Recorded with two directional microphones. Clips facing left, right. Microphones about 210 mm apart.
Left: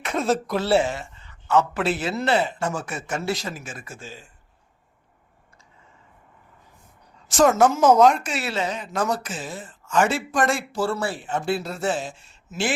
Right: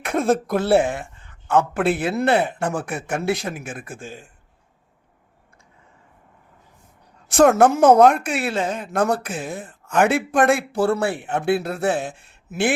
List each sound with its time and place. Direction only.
0.0 s a woman's voice: 55° right (ahead or behind)
7.3 s a woman's voice: 60° right (ahead or behind)